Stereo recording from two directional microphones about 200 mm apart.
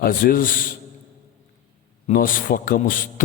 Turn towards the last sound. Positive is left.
turn(degrees=45)  # may be behind; listen again after turning